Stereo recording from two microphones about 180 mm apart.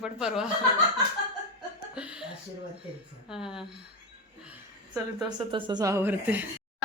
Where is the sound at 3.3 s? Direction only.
5° right (ahead or behind).